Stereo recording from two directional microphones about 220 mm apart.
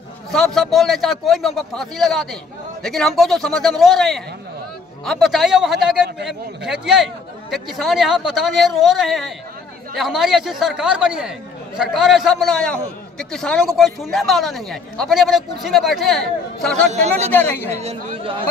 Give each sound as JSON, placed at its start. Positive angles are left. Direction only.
{"t": 0.3, "sound": "speech", "side_deg": 0}
{"t": 16.9, "sound": "speech", "side_deg": -30}
{"t": 17.3, "sound": "speech", "side_deg": 10}
{"t": 17.7, "sound": "speech", "side_deg": -30}